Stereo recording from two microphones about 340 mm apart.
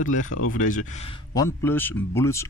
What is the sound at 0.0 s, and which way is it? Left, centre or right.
Speech, left.